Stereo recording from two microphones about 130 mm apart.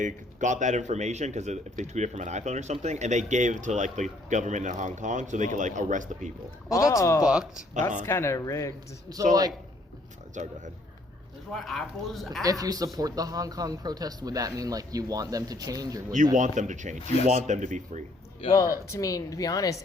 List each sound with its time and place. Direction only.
0.0 s speech: 70° right (ahead or behind)
6.7 s a woman's voice: 25° left (ahead or behind)
7.7 s speech: 70° right (ahead or behind)
8.0 s a woman's voice: 20° left (ahead or behind)
9.1 s speech: 30° right (ahead or behind)
10.4 s speech: 65° right (ahead or behind)
11.5 s speech: centre (ahead or behind)
12.4 s speech: 30° right (ahead or behind)
16.3 s speech: 75° right (ahead or behind)
17.0 s speech: 55° left (ahead or behind)
17.3 s speech: 70° right (ahead or behind)
18.4 s speech: 45° left (ahead or behind)
18.9 s a woman's voice: 25° left (ahead or behind)